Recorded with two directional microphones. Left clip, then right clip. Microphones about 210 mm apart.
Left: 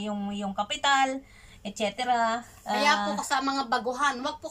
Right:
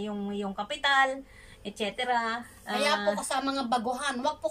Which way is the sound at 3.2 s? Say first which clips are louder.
Left 3 dB; 15° right (ahead or behind).